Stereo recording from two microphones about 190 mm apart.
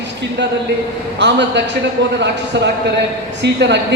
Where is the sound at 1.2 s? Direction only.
65° right (ahead or behind).